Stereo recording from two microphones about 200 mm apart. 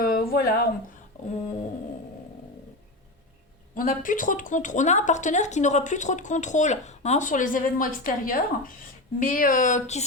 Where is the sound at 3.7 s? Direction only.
40° left (ahead or behind).